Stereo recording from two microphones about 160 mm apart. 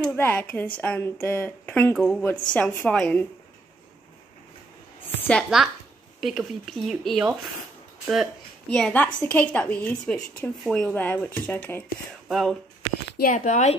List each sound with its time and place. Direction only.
0.0 s a woman's voice: 5° left (ahead or behind)
5.3 s speech: centre (ahead or behind)
13.2 s speech: 55° left (ahead or behind)